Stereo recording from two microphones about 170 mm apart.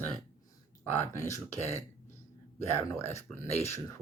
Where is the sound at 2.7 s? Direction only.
15° left (ahead or behind).